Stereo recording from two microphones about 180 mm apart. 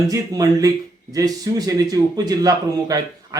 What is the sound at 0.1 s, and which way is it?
Speech, 20° right (ahead or behind).